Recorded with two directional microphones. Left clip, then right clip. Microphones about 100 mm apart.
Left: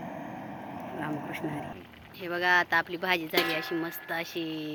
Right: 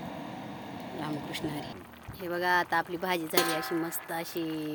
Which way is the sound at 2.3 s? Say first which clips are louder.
Left 3 dB; 50° right (ahead or behind).